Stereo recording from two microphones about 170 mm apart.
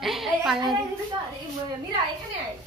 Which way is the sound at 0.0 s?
Centre (ahead or behind).